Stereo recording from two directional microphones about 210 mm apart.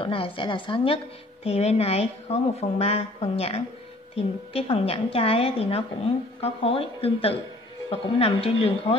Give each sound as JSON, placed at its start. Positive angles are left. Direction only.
{"t": 0.0, "sound": "a woman's voice", "side_deg": 25}